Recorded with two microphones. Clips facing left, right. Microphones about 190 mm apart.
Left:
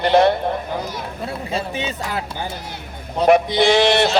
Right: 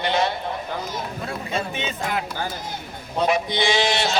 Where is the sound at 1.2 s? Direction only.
35° left (ahead or behind).